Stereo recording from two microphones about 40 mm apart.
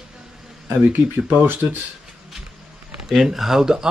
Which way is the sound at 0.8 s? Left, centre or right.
Right.